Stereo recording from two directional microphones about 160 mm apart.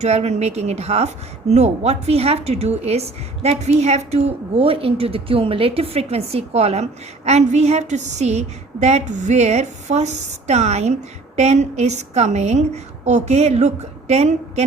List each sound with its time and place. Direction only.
0.0 s a woman's voice: 40° right (ahead or behind)